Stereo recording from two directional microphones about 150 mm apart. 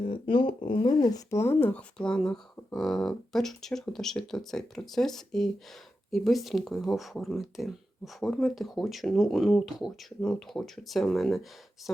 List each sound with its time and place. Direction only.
0.3 s speech: 35° left (ahead or behind); by 11.4 s centre (ahead or behind)